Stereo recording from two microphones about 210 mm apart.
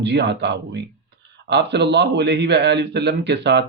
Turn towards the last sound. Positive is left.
turn(degrees=-55)  # may be behind; listen again after turning